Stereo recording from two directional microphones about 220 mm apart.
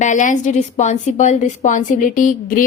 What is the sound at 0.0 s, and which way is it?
A woman's voice, 35° left (ahead or behind).